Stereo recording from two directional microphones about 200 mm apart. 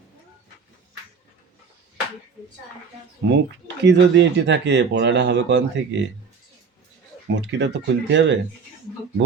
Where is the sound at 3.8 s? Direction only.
60° right (ahead or behind).